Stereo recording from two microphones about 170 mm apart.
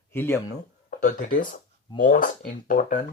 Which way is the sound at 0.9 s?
50° left (ahead or behind).